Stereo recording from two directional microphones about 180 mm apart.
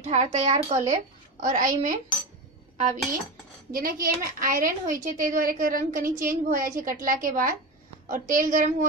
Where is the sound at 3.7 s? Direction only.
55° right (ahead or behind).